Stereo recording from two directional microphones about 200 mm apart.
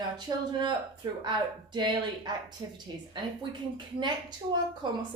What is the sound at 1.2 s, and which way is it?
Speech, 20° right (ahead or behind).